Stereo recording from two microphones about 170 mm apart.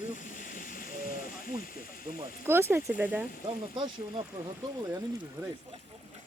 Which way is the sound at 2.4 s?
15° right (ahead or behind).